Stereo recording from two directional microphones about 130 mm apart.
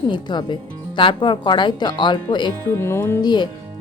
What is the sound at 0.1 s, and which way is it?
Speech, 35° left (ahead or behind).